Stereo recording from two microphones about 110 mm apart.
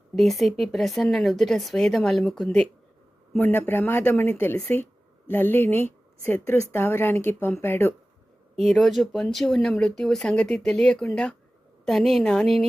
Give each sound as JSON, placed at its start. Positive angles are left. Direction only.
{"t": 0.2, "sound": "speech", "side_deg": 0}
{"t": 3.3, "sound": "speech", "side_deg": 15}
{"t": 8.5, "sound": "speech", "side_deg": 5}